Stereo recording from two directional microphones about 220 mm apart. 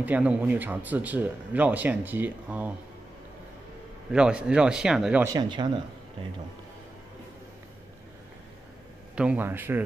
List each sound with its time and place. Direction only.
0.0 s speech: 5° right (ahead or behind)
4.1 s speech: 5° right (ahead or behind)
5.3 s speech: 20° right (ahead or behind)
9.1 s speech: 5° right (ahead or behind)